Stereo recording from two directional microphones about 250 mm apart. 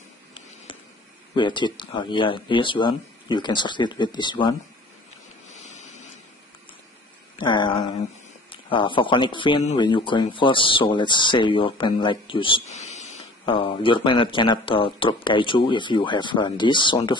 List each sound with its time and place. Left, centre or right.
1.3 s speech: centre
5.5 s vehicle: left
7.3 s a sound: centre
8.5 s speech: centre